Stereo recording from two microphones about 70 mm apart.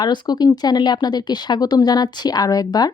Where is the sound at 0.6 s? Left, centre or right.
Left.